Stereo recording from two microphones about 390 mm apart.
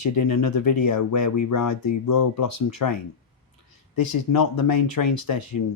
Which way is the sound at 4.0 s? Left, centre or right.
Left.